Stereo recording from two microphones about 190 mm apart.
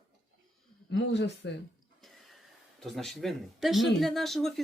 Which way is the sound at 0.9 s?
65° left (ahead or behind).